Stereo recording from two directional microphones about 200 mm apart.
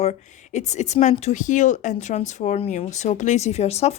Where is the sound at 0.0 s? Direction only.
35° left (ahead or behind).